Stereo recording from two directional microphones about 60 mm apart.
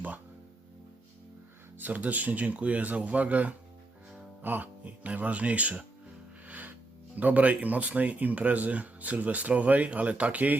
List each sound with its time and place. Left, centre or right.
1.8 s speech: right
6.5 s music: right
7.2 s speech: right